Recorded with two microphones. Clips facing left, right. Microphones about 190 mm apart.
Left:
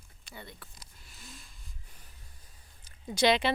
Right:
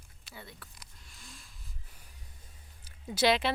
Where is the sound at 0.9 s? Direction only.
5° left (ahead or behind).